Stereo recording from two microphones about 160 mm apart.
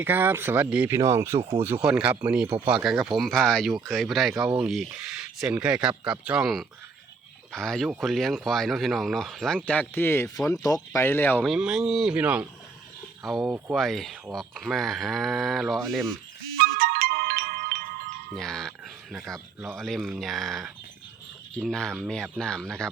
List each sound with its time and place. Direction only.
0.0 s speech: 15° right (ahead or behind)
1.4 s speech: 40° right (ahead or behind)
1.6 s speech: 10° right (ahead or behind); by 11.4 s 10° left (ahead or behind)
11.4 s speech: 5° right (ahead or behind)
16.6 s music: 65° right (ahead or behind)
18.3 s speech: 5° left (ahead or behind)